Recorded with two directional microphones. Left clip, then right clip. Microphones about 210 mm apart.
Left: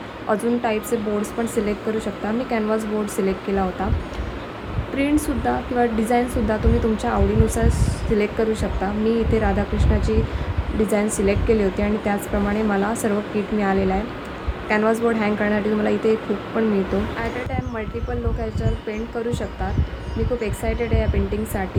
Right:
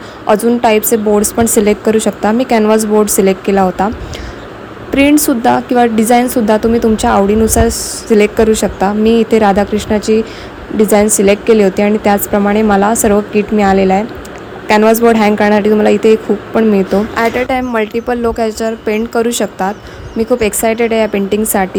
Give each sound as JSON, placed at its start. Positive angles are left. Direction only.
{"t": 0.3, "sound": "a woman's voice", "side_deg": -35}
{"t": 4.9, "sound": "a woman's voice", "side_deg": -35}